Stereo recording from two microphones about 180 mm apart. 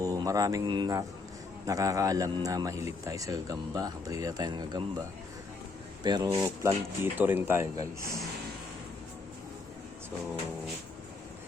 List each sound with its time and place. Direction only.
0.0 s speech: 20° right (ahead or behind)